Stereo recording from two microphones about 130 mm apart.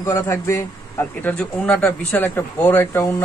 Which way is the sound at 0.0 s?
20° left (ahead or behind).